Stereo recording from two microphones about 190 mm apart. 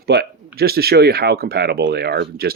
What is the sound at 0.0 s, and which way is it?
Speech, 60° right (ahead or behind).